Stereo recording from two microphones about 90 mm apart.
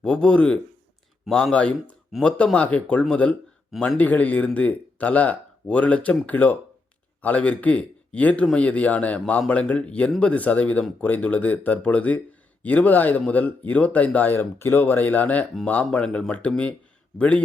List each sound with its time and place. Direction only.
0.0 s speech: 10° left (ahead or behind)
3.9 s speech: 20° left (ahead or behind)